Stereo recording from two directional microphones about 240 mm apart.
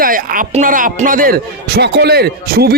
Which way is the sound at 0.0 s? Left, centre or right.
Right.